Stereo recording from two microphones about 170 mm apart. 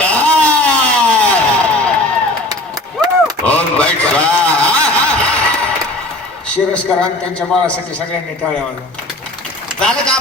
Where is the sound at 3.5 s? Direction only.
10° left (ahead or behind).